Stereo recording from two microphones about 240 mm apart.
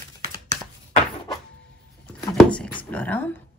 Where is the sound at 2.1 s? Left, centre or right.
Centre.